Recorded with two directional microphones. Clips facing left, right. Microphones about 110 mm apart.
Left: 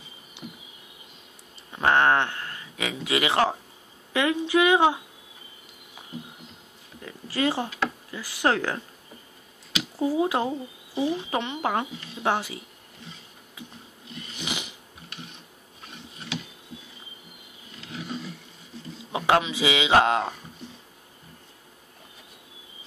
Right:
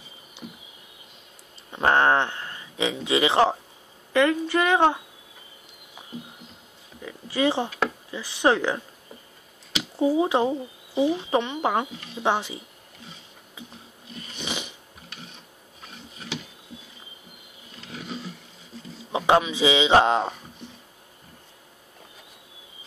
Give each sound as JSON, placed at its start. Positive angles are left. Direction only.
{"t": 1.8, "sound": "speech", "side_deg": -30}
{"t": 4.1, "sound": "a woman's voice", "side_deg": 10}
{"t": 7.2, "sound": "speech", "side_deg": -20}
{"t": 9.9, "sound": "speech", "side_deg": -20}
{"t": 14.3, "sound": "a sound", "side_deg": 15}
{"t": 19.1, "sound": "a sound", "side_deg": -20}
{"t": 19.6, "sound": "speech", "side_deg": -20}